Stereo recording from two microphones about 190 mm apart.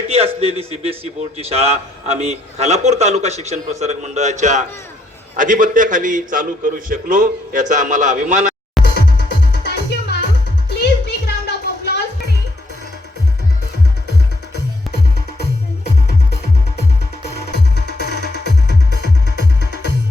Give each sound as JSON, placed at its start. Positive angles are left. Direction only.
{"t": 0.1, "sound": "a man's voice", "side_deg": -35}
{"t": 9.0, "sound": "music", "side_deg": 60}
{"t": 14.9, "sound": "music", "side_deg": 60}
{"t": 17.5, "sound": "music", "side_deg": 60}